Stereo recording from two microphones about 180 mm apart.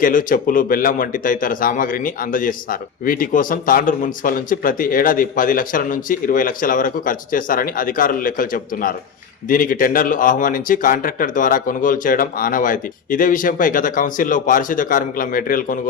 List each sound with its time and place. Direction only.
0.0 s a man's voice: 50° left (ahead or behind)